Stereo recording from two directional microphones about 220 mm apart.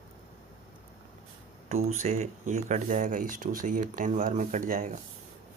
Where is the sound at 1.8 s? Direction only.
30° right (ahead or behind).